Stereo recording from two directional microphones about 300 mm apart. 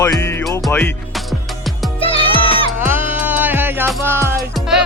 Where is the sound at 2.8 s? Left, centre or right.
Centre.